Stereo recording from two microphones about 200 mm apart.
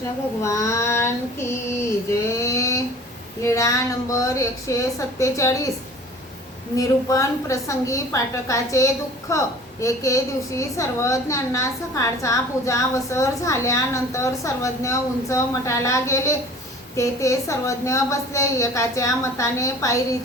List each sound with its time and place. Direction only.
0.4 s a woman's voice: 15° left (ahead or behind)
2.0 s a sound: 15° left (ahead or behind)
3.4 s a woman's voice: 15° left (ahead or behind)
6.7 s a woman's voice: 15° left (ahead or behind)